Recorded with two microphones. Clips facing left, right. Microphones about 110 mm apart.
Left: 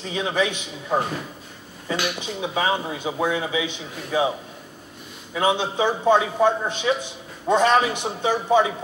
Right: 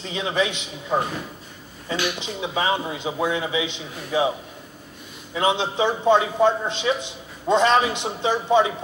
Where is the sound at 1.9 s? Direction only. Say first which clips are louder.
Even; 15° left (ahead or behind).